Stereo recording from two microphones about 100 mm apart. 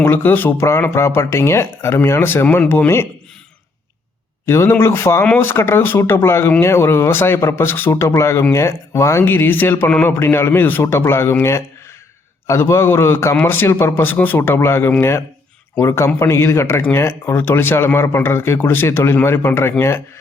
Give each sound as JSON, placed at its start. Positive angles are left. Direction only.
{"t": 0.0, "sound": "speech", "side_deg": 20}
{"t": 4.4, "sound": "speech", "side_deg": 25}